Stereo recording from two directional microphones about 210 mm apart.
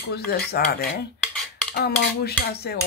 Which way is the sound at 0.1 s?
50° left (ahead or behind).